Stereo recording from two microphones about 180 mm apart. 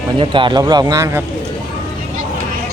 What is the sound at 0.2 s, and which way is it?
Speech, 25° right (ahead or behind).